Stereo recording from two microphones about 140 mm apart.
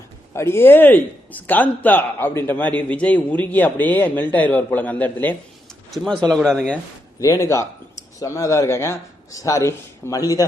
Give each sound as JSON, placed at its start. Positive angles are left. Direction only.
{"t": 0.3, "sound": "a man's voice", "side_deg": 20}
{"t": 7.2, "sound": "a man's voice", "side_deg": 20}